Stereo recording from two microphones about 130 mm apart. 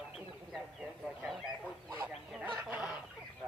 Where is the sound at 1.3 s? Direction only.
5° right (ahead or behind).